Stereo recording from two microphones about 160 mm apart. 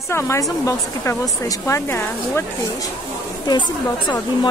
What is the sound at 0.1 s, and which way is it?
Speech, 15° left (ahead or behind).